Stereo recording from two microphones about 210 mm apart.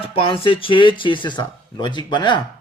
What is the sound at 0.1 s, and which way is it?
Speech, 25° left (ahead or behind).